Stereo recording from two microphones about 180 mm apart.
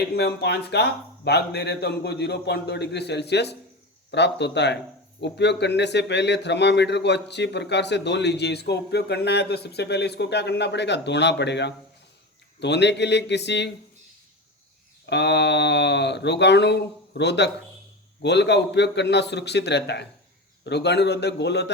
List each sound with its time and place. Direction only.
0.2 s speech: 70° left (ahead or behind)
15.1 s speech: 70° left (ahead or behind)